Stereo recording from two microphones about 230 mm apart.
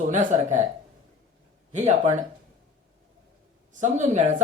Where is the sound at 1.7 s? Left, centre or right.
Right.